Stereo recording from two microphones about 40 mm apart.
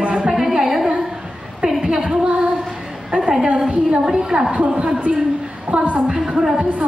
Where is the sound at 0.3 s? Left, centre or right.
Centre.